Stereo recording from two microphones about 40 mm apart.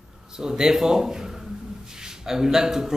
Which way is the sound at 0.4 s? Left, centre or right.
Centre.